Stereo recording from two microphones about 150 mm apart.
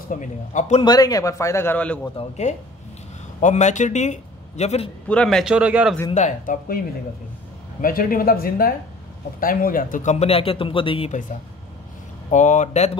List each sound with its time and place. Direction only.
0.1 s a man's voice: 55° left (ahead or behind)
0.8 s a man's voice: 25° left (ahead or behind)
2.1 s a man's voice: 50° left (ahead or behind)
5.0 s a man's voice: 5° left (ahead or behind)
5.4 s a man's voice: 5° right (ahead or behind)
6.1 s speech: 55° left (ahead or behind)
7.8 s a man's voice: 70° left (ahead or behind); by 11.1 s 35° left (ahead or behind)
12.3 s a man's voice: 55° left (ahead or behind)